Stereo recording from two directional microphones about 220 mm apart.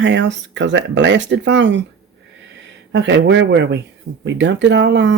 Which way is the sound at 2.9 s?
55° right (ahead or behind).